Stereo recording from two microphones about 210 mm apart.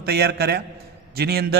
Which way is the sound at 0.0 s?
50° right (ahead or behind).